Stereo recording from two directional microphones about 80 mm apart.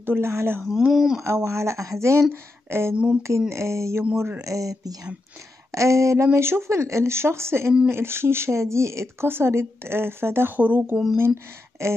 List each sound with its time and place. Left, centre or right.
0.0 s speech: right
0.9 s speech: centre
1.2 s speech: right
11.8 s speech: right